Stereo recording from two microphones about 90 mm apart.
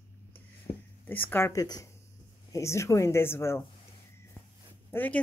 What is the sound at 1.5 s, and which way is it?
Speech, 45° left (ahead or behind).